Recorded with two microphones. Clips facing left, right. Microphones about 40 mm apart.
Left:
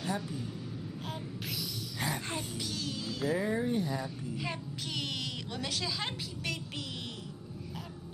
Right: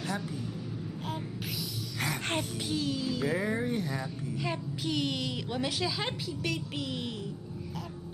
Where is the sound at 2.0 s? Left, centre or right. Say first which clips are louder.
Right 4 dB; right.